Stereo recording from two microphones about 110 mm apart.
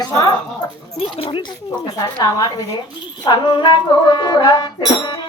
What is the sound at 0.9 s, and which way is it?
Speech, 55° left (ahead or behind).